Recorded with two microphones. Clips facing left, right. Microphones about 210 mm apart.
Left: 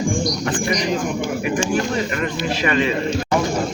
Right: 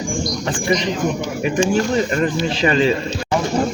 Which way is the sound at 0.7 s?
25° right (ahead or behind).